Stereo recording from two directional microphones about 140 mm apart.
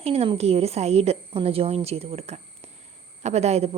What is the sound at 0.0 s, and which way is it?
A woman's voice, 45° right (ahead or behind).